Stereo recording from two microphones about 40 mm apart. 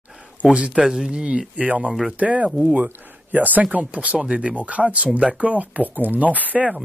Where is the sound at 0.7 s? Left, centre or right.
Centre.